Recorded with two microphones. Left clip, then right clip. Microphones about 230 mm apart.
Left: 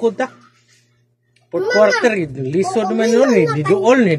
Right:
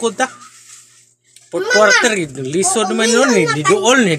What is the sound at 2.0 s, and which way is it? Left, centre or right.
Speech, centre.